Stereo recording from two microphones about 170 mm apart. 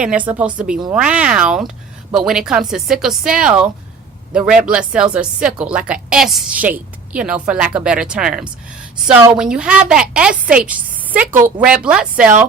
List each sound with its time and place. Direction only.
0.0 s a woman's voice: 10° right (ahead or behind)